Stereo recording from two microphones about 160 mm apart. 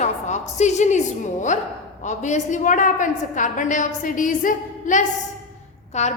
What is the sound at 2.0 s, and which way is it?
A woman's voice, 50° left (ahead or behind).